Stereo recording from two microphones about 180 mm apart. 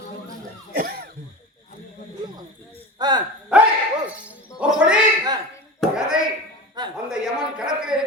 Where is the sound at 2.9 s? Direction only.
20° right (ahead or behind).